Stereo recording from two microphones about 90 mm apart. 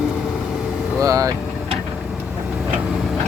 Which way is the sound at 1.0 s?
40° right (ahead or behind).